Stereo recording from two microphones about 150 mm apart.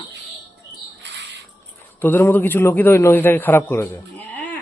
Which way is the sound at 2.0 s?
10° left (ahead or behind).